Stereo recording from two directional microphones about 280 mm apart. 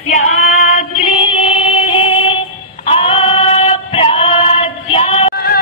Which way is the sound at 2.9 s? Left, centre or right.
Left.